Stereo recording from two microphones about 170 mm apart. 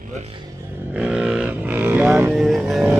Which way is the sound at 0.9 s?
5° right (ahead or behind).